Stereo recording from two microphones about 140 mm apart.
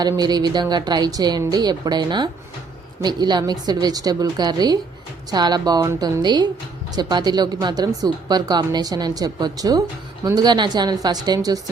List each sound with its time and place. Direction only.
0.0 s speech: 30° right (ahead or behind)